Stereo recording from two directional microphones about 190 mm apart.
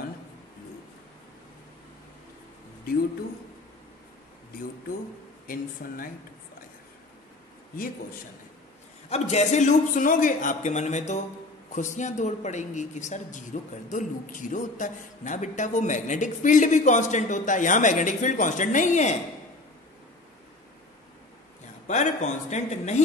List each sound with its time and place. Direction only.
5.8 s speech: 50° left (ahead or behind)
9.1 s a woman's voice: 35° left (ahead or behind)
21.8 s a woman's voice: 40° left (ahead or behind)